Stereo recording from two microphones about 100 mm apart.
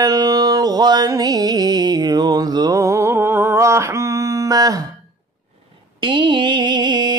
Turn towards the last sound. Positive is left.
turn(degrees=-50)  # may be behind; listen again after turning